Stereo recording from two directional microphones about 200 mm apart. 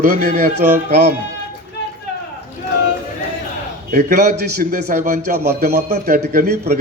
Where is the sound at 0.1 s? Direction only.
50° right (ahead or behind).